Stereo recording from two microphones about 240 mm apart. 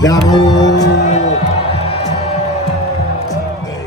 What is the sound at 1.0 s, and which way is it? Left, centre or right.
Music, left.